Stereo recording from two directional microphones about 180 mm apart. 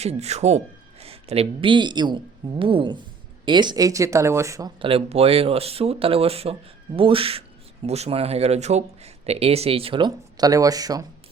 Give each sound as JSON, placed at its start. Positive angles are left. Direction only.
{"t": 0.0, "sound": "speech", "side_deg": -35}
{"t": 4.8, "sound": "speech", "side_deg": -30}